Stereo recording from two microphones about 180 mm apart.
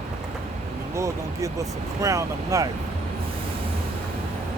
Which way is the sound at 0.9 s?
15° right (ahead or behind).